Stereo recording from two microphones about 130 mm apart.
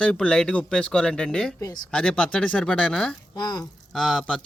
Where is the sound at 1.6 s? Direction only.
30° left (ahead or behind).